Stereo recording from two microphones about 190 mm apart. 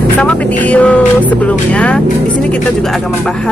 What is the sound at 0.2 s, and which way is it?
Speech, 5° left (ahead or behind).